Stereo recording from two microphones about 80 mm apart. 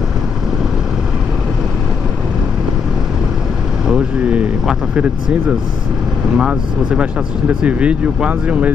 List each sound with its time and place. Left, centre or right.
3.8 s speech: centre
6.3 s speech: centre